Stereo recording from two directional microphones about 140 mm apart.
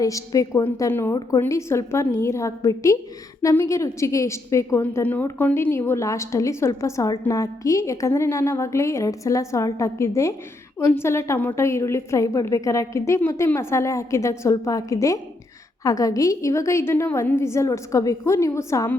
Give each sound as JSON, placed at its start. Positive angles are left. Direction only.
{"t": 0.0, "sound": "a woman's voice", "side_deg": 25}